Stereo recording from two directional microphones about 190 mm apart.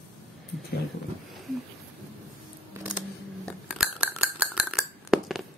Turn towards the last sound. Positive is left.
turn(degrees=-5)  # may be behind; listen again after turning